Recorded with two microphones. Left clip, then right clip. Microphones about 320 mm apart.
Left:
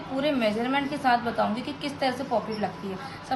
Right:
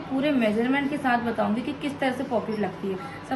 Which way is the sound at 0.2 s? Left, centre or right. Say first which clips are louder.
Right 1 dB; left.